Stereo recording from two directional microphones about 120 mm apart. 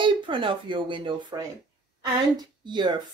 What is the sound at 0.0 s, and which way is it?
Speech, 45° right (ahead or behind).